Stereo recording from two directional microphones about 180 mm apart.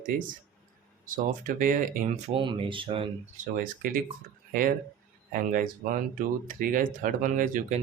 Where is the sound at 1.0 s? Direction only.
50° right (ahead or behind).